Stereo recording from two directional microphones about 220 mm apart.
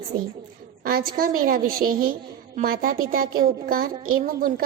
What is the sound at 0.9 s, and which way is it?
A child's voice, 45° right (ahead or behind).